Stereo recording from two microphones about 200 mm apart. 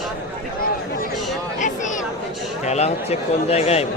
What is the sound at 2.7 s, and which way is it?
A man's voice, 30° left (ahead or behind).